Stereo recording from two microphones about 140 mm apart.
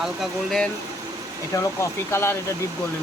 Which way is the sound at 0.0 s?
Centre (ahead or behind).